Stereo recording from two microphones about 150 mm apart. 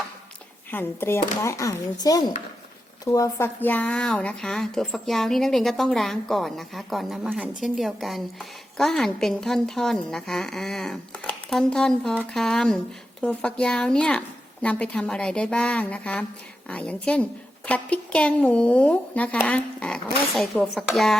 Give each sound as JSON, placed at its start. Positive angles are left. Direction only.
{"t": 0.7, "sound": "speech", "side_deg": 15}